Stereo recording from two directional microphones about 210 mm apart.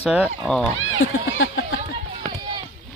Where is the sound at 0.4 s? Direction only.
Centre (ahead or behind).